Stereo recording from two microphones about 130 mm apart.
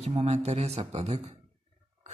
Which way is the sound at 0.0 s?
55° right (ahead or behind).